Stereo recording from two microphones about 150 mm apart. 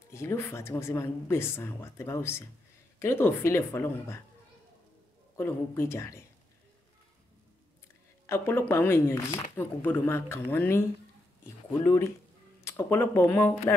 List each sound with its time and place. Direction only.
0.1 s a woman's voice: 15° left (ahead or behind)
5.4 s a woman's voice: 15° left (ahead or behind)
8.3 s a woman's voice: 15° left (ahead or behind)
11.8 s a woman's voice: 20° left (ahead or behind)